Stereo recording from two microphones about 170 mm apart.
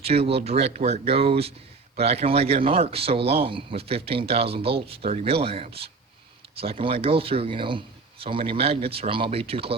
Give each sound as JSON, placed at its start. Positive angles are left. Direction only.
{"t": 0.0, "sound": "a man's voice", "side_deg": -35}